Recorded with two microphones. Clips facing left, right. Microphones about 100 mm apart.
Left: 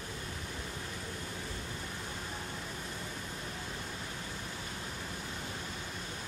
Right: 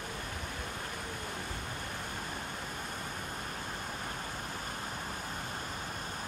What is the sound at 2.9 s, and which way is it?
Pink noise, 50° right (ahead or behind).